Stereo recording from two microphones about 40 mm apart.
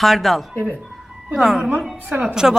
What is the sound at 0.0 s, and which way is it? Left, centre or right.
A man's voice, centre.